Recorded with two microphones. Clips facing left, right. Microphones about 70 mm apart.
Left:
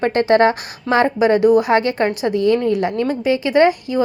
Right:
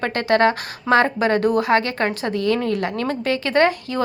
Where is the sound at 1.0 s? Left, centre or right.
Centre.